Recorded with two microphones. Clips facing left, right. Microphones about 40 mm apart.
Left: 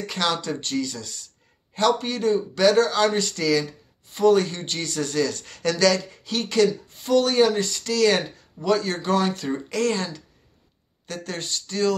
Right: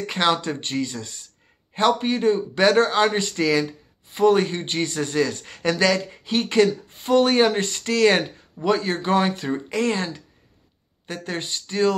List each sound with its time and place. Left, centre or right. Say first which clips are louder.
0.0 s speech: right 4 dB; right